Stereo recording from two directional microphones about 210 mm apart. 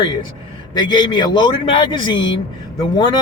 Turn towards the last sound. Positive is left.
turn(degrees=20)  # may be behind; listen again after turning